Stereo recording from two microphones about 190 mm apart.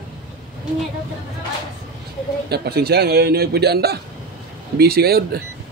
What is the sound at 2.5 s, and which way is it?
A man's voice, 60° right (ahead or behind).